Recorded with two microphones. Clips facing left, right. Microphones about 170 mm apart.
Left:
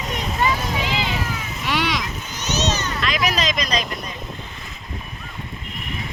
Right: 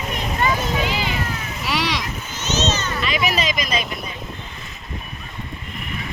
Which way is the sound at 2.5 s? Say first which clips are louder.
Right 1 dB; 15° left (ahead or behind).